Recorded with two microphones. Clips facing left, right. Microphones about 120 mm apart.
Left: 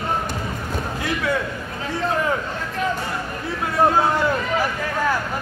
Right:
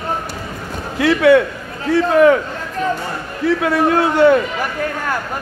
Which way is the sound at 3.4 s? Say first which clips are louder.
Right 5 dB; 70° right (ahead or behind).